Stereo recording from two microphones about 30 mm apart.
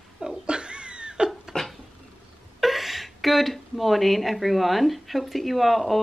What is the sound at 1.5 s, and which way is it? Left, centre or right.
Dishes, left.